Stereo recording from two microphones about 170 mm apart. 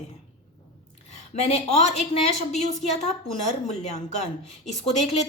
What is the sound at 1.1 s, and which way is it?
A woman's voice, 40° left (ahead or behind).